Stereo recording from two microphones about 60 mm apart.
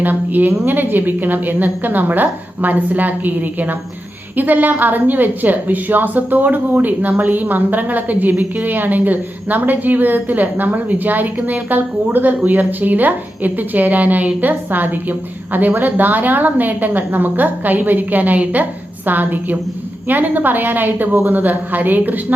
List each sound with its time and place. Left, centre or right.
0.0 s a woman's voice: right